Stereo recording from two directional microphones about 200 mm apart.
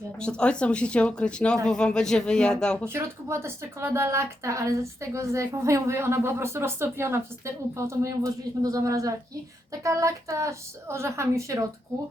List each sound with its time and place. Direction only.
0.2 s speech: 5° left (ahead or behind)
2.8 s a woman's voice: 10° right (ahead or behind)